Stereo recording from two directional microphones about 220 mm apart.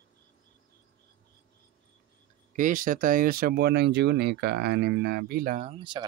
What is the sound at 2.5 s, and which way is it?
Speech, 35° right (ahead or behind).